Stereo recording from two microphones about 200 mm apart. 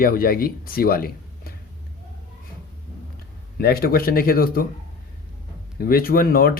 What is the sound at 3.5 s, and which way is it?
Speech, 50° left (ahead or behind).